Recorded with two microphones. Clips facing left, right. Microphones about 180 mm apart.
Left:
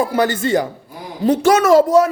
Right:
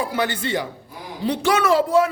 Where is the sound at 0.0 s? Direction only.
40° left (ahead or behind).